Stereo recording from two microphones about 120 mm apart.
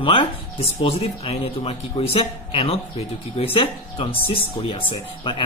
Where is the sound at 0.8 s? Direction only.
55° left (ahead or behind).